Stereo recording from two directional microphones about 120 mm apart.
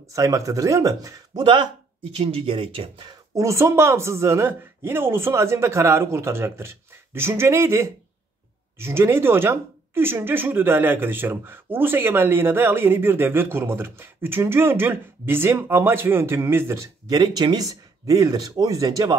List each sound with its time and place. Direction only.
0.1 s speech: 30° right (ahead or behind)
2.1 s speech: 55° right (ahead or behind)
3.1 s speech: 25° right (ahead or behind)
17.1 s speech: 35° right (ahead or behind)